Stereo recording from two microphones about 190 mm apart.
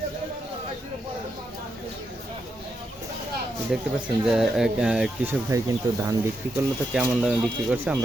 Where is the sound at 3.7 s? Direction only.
5° right (ahead or behind).